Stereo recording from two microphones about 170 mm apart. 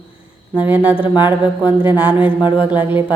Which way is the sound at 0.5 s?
10° right (ahead or behind).